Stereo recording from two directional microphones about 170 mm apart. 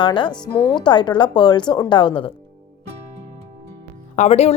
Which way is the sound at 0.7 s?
25° left (ahead or behind).